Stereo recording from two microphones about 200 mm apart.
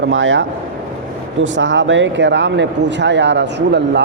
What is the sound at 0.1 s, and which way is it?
Speech, 70° right (ahead or behind).